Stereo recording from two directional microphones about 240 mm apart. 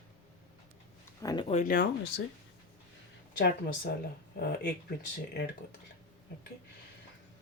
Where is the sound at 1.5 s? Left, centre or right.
Left.